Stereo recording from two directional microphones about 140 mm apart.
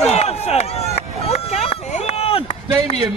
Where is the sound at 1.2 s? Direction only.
50° left (ahead or behind).